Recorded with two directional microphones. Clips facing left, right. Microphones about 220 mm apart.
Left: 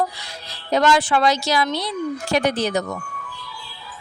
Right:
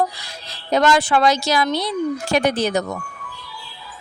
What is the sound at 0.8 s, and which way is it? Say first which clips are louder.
A woman's voice: right 1 dB; 45° right (ahead or behind).